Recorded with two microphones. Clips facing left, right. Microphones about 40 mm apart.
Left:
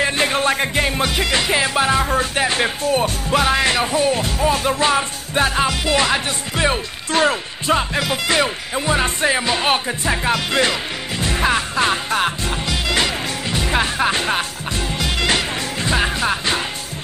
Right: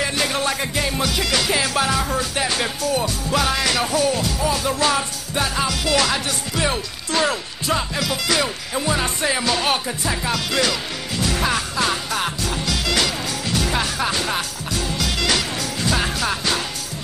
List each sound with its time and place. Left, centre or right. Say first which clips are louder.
0.0 s music: left 4 dB; left
8.7 s speech: left 3 dB; left
9.3 s speech: left 2 dB; left
10.0 s music: left 5 dB; left